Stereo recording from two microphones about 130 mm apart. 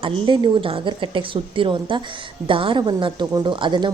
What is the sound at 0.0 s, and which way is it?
A woman's voice, 40° right (ahead or behind).